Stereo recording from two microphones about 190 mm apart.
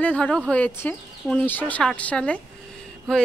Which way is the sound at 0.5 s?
10° left (ahead or behind).